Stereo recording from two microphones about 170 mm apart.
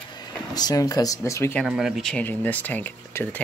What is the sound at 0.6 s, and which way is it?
Speech, 20° left (ahead or behind).